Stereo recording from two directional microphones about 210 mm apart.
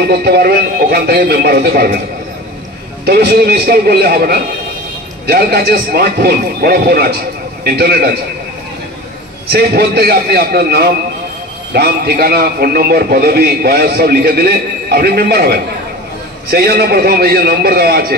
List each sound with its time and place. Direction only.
0.1 s a man's voice: 50° right (ahead or behind)
3.1 s a man's voice: 50° right (ahead or behind)
9.5 s a man's voice: 50° right (ahead or behind)